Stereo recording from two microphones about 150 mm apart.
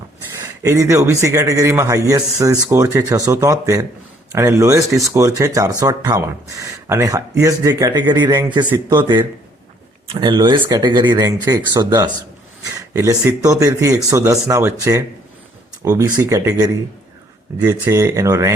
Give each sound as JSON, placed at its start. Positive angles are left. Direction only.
{"t": 0.6, "sound": "speech", "side_deg": -20}
{"t": 10.1, "sound": "speech", "side_deg": -30}